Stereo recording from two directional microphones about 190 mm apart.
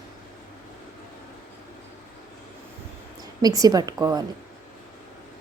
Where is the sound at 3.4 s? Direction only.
20° right (ahead or behind).